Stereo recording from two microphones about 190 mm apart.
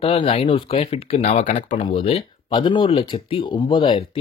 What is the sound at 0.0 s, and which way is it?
Speech, 30° left (ahead or behind).